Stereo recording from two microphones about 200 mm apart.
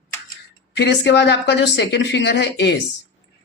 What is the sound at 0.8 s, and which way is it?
Speech, 60° left (ahead or behind).